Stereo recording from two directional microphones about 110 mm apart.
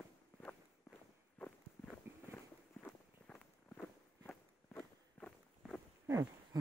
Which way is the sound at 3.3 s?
15° left (ahead or behind).